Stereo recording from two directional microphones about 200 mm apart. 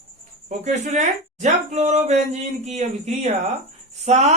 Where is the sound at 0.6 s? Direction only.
35° right (ahead or behind).